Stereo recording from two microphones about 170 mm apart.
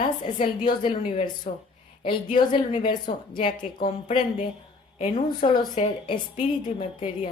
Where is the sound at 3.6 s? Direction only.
50° left (ahead or behind).